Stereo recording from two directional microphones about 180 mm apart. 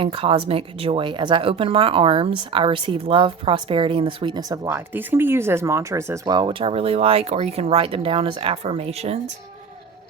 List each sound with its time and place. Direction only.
0.0 s speech: 30° right (ahead or behind)